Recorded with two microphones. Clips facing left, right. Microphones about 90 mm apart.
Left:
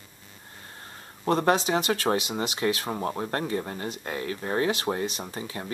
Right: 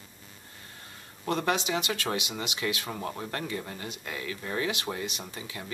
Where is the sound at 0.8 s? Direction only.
40° left (ahead or behind).